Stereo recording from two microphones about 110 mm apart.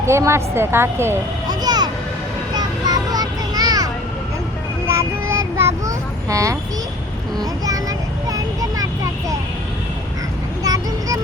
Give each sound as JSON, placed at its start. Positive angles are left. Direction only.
{"t": 0.0, "sound": "a woman's voice", "side_deg": -25}
{"t": 1.5, "sound": "music", "side_deg": -40}
{"t": 2.6, "sound": "vehicle", "side_deg": -35}
{"t": 5.3, "sound": "child singing", "side_deg": -25}
{"t": 10.6, "sound": "vehicle", "side_deg": -35}